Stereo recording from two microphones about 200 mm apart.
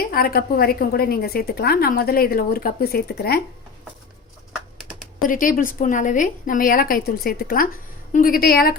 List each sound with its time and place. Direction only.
0.0 s a woman's voice: 50° left (ahead or behind)
5.2 s a woman's voice: 45° left (ahead or behind)